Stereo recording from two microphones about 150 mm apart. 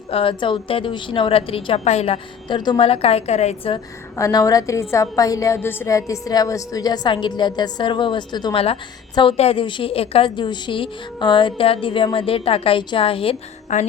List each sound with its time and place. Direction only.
0.1 s a woman's voice: 35° left (ahead or behind)
2.5 s a woman's voice: 30° left (ahead or behind)
4.2 s a woman's voice: 25° left (ahead or behind)
13.7 s music: 55° left (ahead or behind)